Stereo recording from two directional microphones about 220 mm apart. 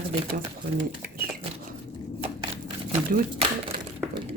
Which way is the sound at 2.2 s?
30° right (ahead or behind).